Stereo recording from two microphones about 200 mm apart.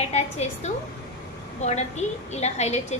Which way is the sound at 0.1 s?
30° left (ahead or behind).